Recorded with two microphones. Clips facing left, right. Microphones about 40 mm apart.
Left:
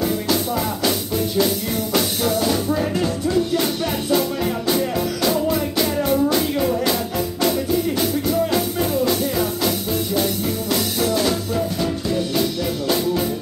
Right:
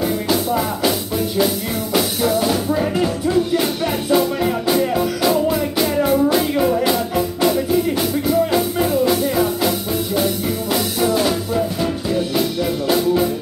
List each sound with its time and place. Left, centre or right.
2.0 s music: centre